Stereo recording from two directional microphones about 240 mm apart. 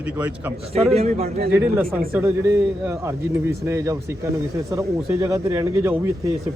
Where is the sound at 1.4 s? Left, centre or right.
Right.